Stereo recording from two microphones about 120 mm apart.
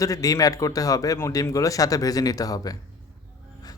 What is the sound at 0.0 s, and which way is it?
A man's voice, 30° left (ahead or behind).